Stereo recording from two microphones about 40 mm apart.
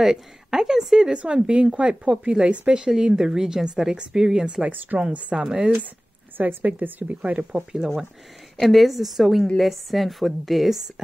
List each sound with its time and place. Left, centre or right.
0.0 s speech: centre
1.1 s speech: right
3.2 s speech: centre
4.9 s a woman's voice: right
5.3 s speech: centre
6.3 s a woman's voice: right
7.7 s speech: right
8.5 s a woman's voice: centre